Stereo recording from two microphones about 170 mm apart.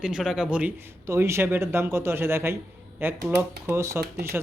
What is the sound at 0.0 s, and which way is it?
Speech, 5° right (ahead or behind).